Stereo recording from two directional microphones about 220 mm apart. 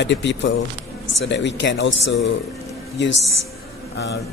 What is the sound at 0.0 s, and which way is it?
Speech, 55° left (ahead or behind).